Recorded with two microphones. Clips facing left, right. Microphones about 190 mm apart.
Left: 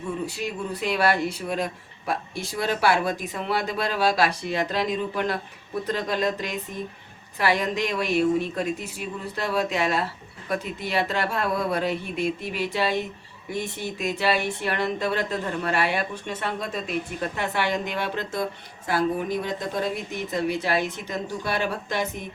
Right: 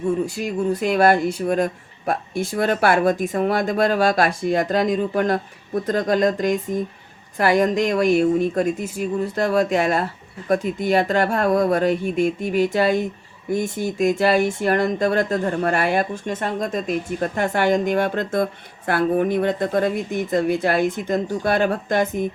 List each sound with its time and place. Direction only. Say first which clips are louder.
0.3 s speech: right 8 dB; 45° right (ahead or behind)